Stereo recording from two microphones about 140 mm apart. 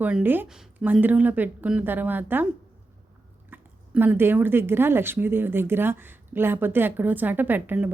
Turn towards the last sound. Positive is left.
turn(degrees=-10)  # may be behind; listen again after turning